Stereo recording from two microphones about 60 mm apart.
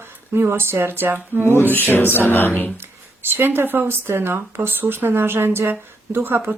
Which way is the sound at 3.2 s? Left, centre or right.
Right.